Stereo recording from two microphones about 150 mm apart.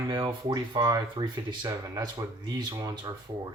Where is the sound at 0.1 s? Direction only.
30° right (ahead or behind).